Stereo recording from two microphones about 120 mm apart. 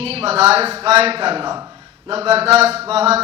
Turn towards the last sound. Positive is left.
turn(degrees=-60)  # may be behind; listen again after turning